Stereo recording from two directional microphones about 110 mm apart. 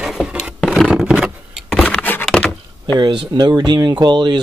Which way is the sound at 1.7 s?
10° left (ahead or behind).